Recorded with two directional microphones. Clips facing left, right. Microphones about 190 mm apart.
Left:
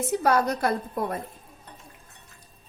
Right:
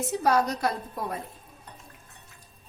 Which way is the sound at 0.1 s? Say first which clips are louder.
Left 1 dB; 60° left (ahead or behind).